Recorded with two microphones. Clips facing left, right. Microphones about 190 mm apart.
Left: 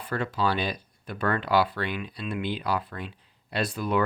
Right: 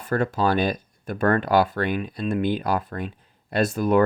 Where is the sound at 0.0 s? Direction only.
45° right (ahead or behind).